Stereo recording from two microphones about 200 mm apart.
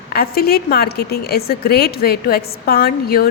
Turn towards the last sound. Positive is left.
turn(degrees=50)  # may be behind; listen again after turning